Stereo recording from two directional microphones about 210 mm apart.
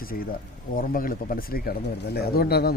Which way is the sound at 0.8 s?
40° left (ahead or behind).